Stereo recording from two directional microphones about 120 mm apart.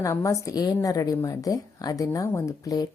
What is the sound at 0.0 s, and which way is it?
Speech, 25° left (ahead or behind).